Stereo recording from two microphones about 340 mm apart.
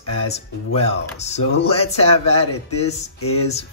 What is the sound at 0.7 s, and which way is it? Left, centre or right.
Speech, centre.